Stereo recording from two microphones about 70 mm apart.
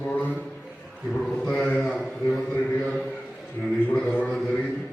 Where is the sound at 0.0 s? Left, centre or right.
Left.